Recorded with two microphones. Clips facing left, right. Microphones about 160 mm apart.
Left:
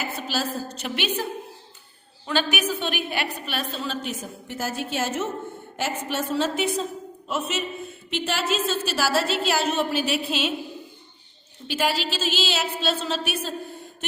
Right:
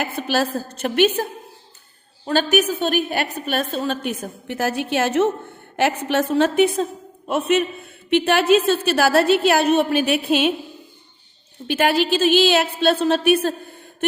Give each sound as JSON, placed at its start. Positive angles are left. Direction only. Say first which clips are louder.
{"t": 0.0, "sound": "a woman's voice", "louder": "right 7 dB", "side_deg": -60}
{"t": 11.7, "sound": "a woman's voice", "louder": "right 7 dB", "side_deg": -55}